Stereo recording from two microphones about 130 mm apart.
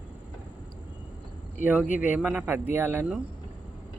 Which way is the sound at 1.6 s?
75° left (ahead or behind).